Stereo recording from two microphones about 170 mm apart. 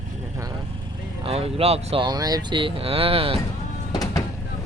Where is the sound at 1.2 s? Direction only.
35° right (ahead or behind).